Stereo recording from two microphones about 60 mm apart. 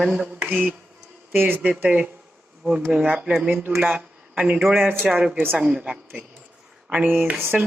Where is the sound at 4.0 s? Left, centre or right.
Right.